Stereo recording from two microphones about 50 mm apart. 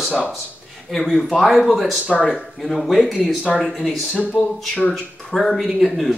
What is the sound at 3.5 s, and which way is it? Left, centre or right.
Speech, centre.